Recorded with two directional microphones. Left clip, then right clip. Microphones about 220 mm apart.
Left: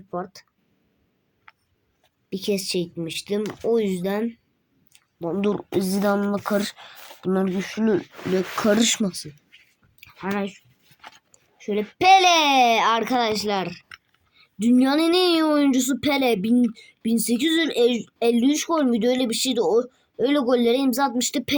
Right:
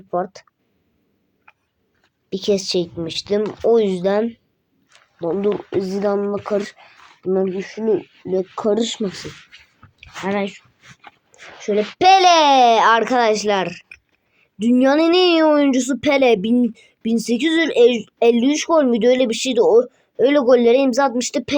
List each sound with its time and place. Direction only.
0.1 s speech: 30° left (ahead or behind)
2.3 s speech: 30° left (ahead or behind)
4.9 s a sound: 30° left (ahead or behind)
5.3 s speech: 55° left (ahead or behind)
9.5 s a sound: centre (ahead or behind)
10.0 s speech: 35° left (ahead or behind)
11.3 s dog: 30° left (ahead or behind)
11.9 s speech: 30° left (ahead or behind)